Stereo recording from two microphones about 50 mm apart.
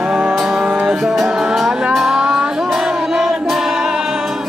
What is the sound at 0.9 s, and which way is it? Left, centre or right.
Music, centre.